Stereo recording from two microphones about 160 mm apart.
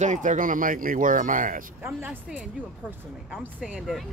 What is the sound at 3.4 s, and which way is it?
Speech, 5° right (ahead or behind).